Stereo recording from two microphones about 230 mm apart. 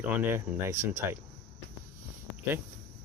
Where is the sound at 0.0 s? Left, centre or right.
Centre.